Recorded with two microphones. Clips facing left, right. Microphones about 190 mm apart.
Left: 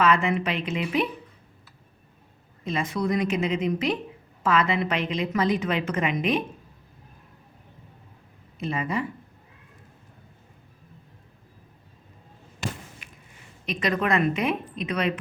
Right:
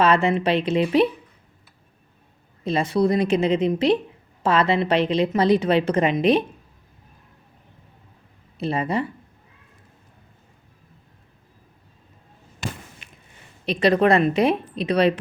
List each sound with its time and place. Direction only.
0.0 s a woman's voice: 35° right (ahead or behind)
2.6 s a woman's voice: 35° right (ahead or behind)
8.5 s a woman's voice: 35° right (ahead or behind)
13.0 s a sound: 25° right (ahead or behind)
13.7 s a woman's voice: 35° right (ahead or behind)